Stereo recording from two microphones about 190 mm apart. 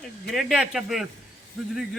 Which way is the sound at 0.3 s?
Centre (ahead or behind).